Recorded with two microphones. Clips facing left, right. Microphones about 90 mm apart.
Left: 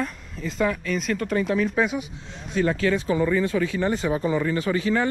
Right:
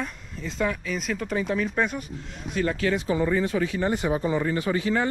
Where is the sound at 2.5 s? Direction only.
40° left (ahead or behind).